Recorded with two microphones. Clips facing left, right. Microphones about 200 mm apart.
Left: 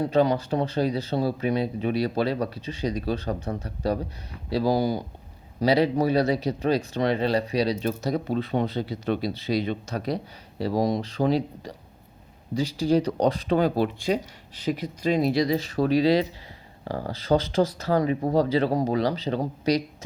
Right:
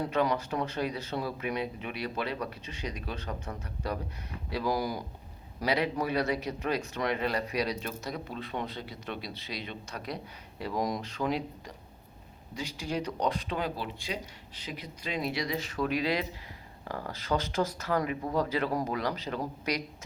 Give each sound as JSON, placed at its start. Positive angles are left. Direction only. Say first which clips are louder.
{"t": 0.0, "sound": "speech", "louder": "left 7 dB", "side_deg": 30}